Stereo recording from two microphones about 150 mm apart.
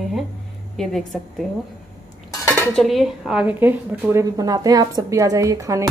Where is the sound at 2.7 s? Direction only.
Centre (ahead or behind); by 5.9 s 20° right (ahead or behind).